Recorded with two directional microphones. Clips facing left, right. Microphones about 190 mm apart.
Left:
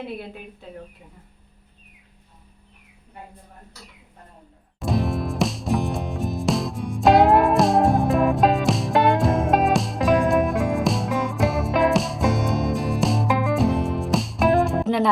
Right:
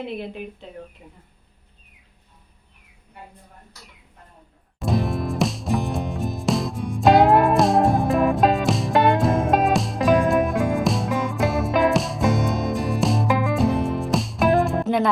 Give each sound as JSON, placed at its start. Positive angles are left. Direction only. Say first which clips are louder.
{"t": 4.8, "sound": "music", "louder": "even", "side_deg": 0}